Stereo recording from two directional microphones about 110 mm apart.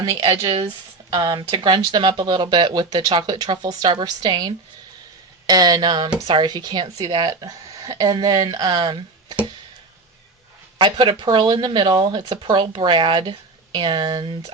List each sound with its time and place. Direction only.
0.3 s speech: 45° right (ahead or behind)
10.8 s speech: 45° right (ahead or behind)